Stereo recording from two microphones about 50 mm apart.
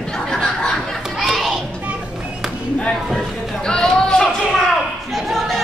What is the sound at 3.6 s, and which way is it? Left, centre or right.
Chatter, centre.